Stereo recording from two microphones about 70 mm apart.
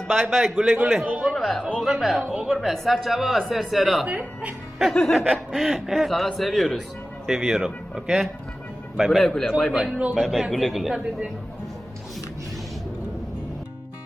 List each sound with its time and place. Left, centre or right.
0.1 s a man's voice: centre
1.2 s a sound: centre
1.8 s a man's voice: centre
2.2 s a man's voice: centre
2.7 s a man's voice: centre
4.0 s speech: right
4.8 s a man's voice: centre
10.9 s a man's voice: centre